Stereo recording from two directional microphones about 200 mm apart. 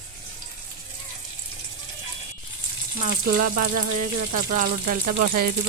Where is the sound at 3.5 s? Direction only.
40° right (ahead or behind).